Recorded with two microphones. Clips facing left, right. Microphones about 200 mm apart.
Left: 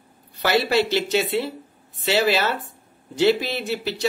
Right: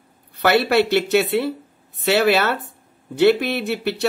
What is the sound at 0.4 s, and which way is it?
Speech, 60° right (ahead or behind).